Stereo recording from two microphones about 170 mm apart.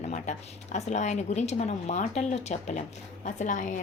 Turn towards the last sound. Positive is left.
turn(degrees=50)  # may be behind; listen again after turning